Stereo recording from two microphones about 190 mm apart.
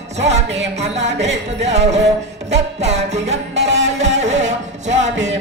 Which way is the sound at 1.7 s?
35° right (ahead or behind).